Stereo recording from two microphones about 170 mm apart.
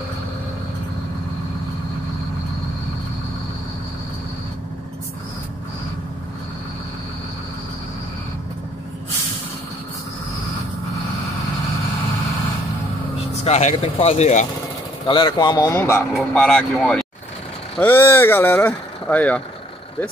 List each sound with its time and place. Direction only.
13.4 s speech: 40° left (ahead or behind)
15.0 s speech: 30° left (ahead or behind); by 19.4 s 10° left (ahead or behind)